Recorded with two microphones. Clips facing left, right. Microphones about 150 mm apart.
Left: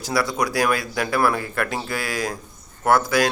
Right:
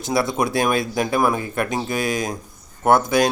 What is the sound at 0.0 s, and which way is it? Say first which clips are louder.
A man's voice: right 2 dB; 25° right (ahead or behind).